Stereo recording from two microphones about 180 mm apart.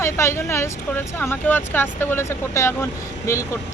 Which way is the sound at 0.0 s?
15° left (ahead or behind).